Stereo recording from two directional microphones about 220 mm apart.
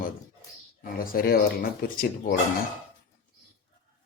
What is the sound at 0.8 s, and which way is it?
Speech, 40° left (ahead or behind).